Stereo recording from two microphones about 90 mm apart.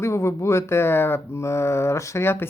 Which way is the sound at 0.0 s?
30° left (ahead or behind).